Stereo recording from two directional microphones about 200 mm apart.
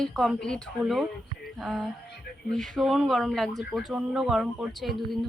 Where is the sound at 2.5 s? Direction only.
Centre (ahead or behind).